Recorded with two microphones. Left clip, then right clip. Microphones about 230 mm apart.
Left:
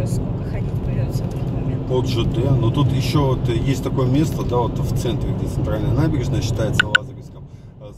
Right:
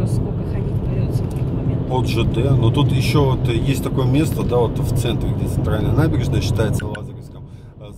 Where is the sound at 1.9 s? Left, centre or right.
Centre.